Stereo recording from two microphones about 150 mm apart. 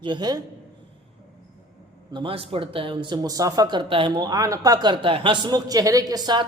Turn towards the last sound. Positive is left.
turn(degrees=-25)  # may be behind; listen again after turning